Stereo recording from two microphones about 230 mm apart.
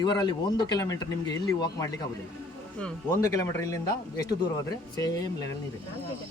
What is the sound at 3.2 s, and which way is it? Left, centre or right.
Speech, centre.